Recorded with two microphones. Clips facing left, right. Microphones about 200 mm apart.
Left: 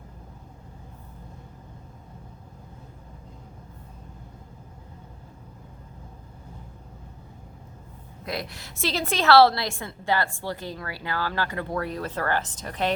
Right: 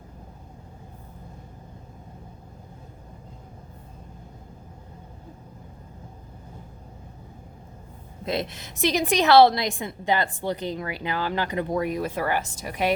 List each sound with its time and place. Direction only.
8.2 s a woman's voice: 25° right (ahead or behind)